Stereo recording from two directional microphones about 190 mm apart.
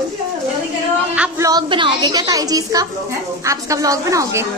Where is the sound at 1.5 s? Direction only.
25° right (ahead or behind).